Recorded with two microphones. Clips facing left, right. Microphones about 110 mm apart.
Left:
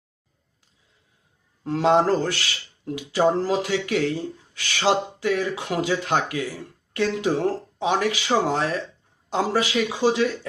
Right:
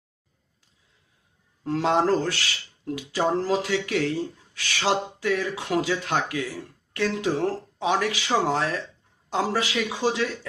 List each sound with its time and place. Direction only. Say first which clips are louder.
1.6 s speech: left 3 dB; 20° left (ahead or behind)